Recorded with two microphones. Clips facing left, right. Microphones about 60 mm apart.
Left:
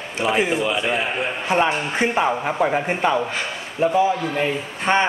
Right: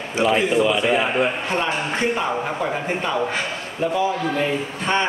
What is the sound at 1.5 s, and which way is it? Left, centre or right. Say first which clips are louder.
A man's voice: left 3 dB; centre.